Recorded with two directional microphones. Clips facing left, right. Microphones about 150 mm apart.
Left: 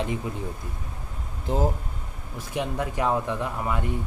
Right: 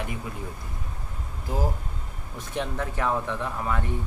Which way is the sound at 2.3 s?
10° left (ahead or behind).